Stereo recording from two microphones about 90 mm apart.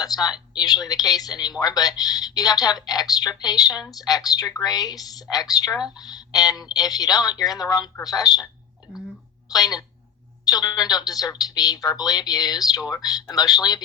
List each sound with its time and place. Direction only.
0.0 s speech: 45° left (ahead or behind)
9.5 s speech: 45° left (ahead or behind)